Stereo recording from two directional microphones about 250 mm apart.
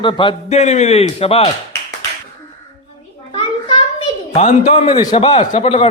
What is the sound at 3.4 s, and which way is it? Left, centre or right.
A child's voice, left.